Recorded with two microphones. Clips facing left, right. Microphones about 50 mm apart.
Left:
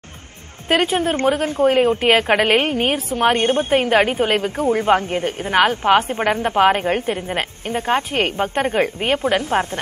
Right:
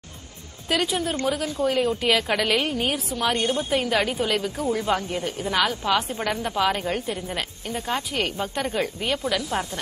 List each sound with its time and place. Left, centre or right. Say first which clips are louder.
0.7 s a woman's voice: left 7 dB; left